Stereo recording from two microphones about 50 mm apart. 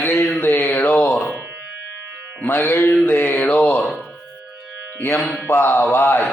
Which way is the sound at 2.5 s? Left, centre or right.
Left.